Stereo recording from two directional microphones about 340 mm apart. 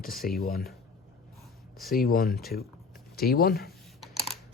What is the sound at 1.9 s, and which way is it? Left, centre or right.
Speech, left.